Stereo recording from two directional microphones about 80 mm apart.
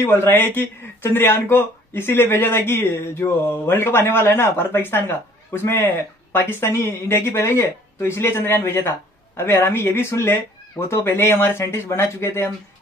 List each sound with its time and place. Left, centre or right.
0.0 s speech: left